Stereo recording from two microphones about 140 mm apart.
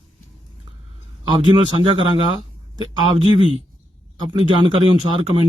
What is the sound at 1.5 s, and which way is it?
Speech, 40° right (ahead or behind).